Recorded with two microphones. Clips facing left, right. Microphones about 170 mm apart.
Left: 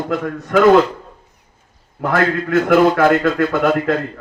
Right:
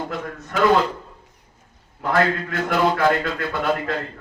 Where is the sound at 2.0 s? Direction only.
50° left (ahead or behind).